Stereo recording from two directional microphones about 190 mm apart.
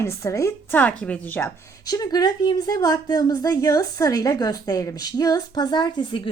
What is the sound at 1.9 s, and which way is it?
A woman's voice, 20° left (ahead or behind).